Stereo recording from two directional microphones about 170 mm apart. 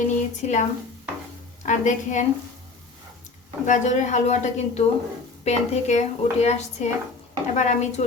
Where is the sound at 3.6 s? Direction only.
45° left (ahead or behind).